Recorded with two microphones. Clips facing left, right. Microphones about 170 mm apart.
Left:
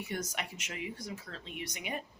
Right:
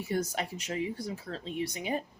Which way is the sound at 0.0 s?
35° right (ahead or behind).